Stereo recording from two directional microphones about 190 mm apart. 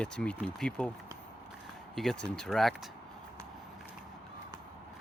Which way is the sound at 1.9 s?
5° left (ahead or behind).